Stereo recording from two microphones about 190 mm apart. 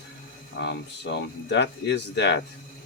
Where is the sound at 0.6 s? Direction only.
65° left (ahead or behind).